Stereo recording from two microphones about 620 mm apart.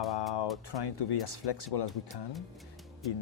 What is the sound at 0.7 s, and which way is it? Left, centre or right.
Speech, left.